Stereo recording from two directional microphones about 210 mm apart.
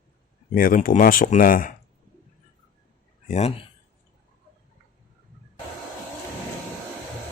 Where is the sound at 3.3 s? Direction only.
30° left (ahead or behind).